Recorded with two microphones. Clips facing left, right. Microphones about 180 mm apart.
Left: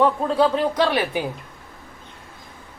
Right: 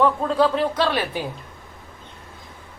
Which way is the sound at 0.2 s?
15° left (ahead or behind).